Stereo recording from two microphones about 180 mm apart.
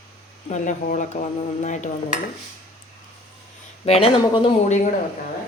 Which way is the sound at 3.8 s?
35° left (ahead or behind).